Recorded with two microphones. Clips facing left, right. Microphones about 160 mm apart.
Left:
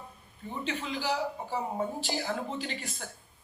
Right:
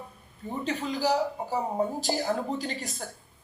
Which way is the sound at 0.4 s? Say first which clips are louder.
Right 4 dB; 40° right (ahead or behind).